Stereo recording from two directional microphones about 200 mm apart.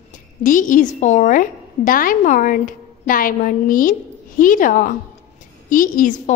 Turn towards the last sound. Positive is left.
turn(degrees=40)  # may be behind; listen again after turning